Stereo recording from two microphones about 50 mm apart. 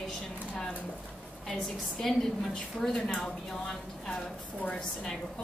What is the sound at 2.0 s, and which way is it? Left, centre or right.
A woman's voice, centre.